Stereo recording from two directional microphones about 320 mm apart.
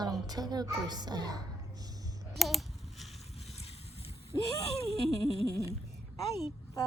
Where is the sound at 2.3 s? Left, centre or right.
Centre.